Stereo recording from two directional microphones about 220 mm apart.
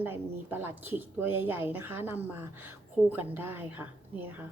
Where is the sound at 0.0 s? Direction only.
10° right (ahead or behind).